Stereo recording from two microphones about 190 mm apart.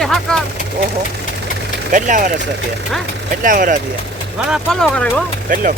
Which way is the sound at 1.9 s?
40° right (ahead or behind).